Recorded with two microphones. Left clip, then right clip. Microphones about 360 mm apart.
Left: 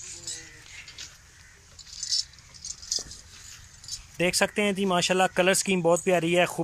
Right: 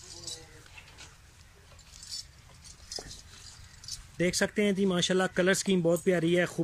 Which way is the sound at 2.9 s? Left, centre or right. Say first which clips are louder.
Left 6 dB; right.